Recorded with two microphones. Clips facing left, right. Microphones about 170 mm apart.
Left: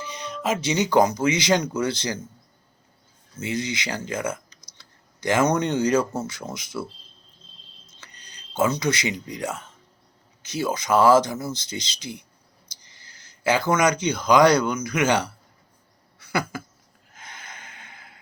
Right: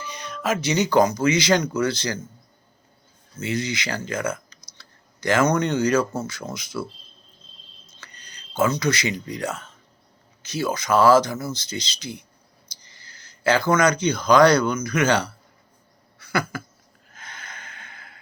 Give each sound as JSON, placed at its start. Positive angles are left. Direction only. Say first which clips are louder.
{"t": 0.0, "sound": "speech", "louder": "even", "side_deg": 25}
{"t": 3.4, "sound": "speech", "louder": "right 1 dB", "side_deg": 20}
{"t": 8.0, "sound": "speech", "louder": "right 2 dB", "side_deg": 20}
{"t": 13.0, "sound": "a sound", "louder": "right 2 dB", "side_deg": 20}
{"t": 13.7, "sound": "speech", "louder": "right 2 dB", "side_deg": 20}
{"t": 16.1, "sound": "a sound", "louder": "right 1 dB", "side_deg": 20}
{"t": 17.1, "sound": "snort", "louder": "right 1 dB", "side_deg": 20}